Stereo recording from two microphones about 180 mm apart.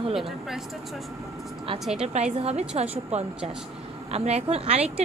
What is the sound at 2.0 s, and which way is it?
A woman's voice, 35° right (ahead or behind).